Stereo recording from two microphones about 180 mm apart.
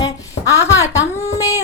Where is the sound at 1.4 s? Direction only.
20° left (ahead or behind).